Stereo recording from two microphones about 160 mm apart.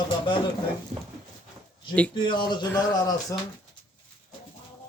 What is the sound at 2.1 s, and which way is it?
A man's voice, 30° left (ahead or behind).